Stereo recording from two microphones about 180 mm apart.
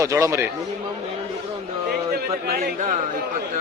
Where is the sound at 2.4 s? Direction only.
60° right (ahead or behind).